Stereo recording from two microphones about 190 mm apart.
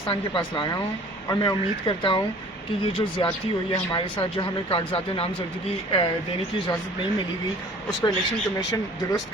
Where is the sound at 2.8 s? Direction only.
30° left (ahead or behind).